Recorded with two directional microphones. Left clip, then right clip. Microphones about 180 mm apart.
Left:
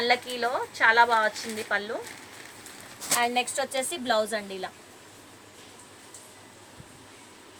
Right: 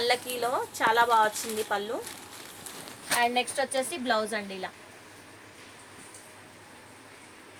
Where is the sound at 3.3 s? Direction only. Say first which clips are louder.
Even; 10° left (ahead or behind).